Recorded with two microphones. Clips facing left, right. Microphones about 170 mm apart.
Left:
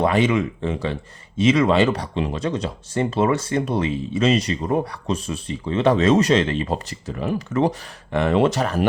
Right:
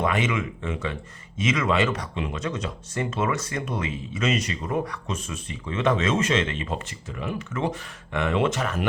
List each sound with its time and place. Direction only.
0.0 s speech: 35° left (ahead or behind)